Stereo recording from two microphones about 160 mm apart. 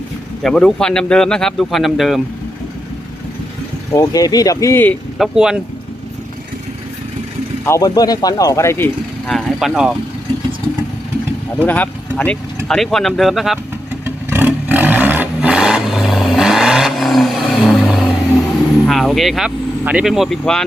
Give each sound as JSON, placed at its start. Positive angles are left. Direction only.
{"t": 0.4, "sound": "speech", "side_deg": 5}
{"t": 3.9, "sound": "speech", "side_deg": 20}
{"t": 5.1, "sound": "speech", "side_deg": 0}
{"t": 7.6, "sound": "speech", "side_deg": 20}
{"t": 9.2, "sound": "speech", "side_deg": 0}
{"t": 11.6, "sound": "speech", "side_deg": 10}
{"t": 14.0, "sound": "vehicle", "side_deg": -15}
{"t": 18.9, "sound": "speech", "side_deg": 0}